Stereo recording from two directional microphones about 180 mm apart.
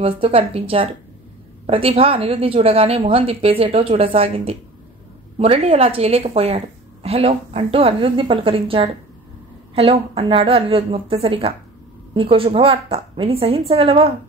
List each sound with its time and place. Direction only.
0.0 s a woman's voice: 30° right (ahead or behind)